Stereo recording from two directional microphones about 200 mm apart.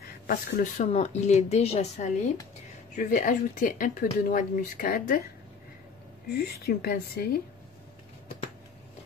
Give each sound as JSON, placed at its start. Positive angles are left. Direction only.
{"t": 0.0, "sound": "speech", "side_deg": 45}
{"t": 6.3, "sound": "speech", "side_deg": 50}